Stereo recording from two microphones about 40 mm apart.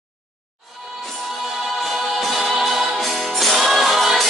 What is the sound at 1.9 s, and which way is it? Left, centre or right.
Music, centre.